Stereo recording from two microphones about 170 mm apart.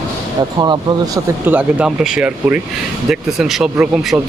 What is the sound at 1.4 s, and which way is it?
A man's voice, 10° right (ahead or behind).